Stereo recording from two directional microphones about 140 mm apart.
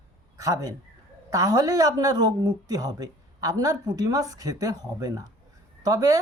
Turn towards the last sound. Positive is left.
turn(degrees=-25)  # may be behind; listen again after turning